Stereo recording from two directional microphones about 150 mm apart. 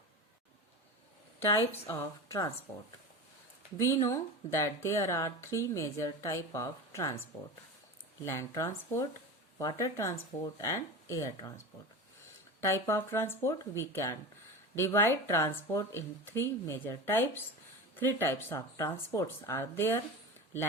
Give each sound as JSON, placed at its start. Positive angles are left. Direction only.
{"t": 1.5, "sound": "speech", "side_deg": 20}
{"t": 8.2, "sound": "speech", "side_deg": 20}